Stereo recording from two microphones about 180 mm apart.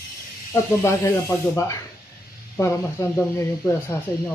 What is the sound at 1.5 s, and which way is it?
Speech, 15° left (ahead or behind).